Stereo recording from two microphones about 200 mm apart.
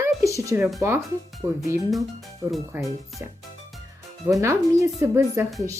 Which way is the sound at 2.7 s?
10° right (ahead or behind).